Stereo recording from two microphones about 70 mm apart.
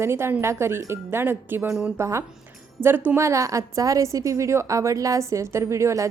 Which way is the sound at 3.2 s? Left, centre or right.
Right.